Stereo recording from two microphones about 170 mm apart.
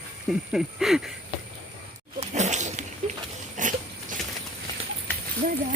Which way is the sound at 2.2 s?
40° right (ahead or behind).